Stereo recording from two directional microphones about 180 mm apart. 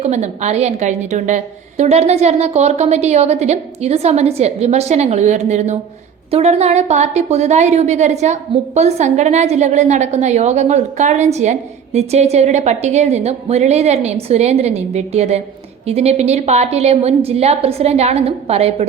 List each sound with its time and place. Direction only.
0.0 s a woman's voice: 40° right (ahead or behind)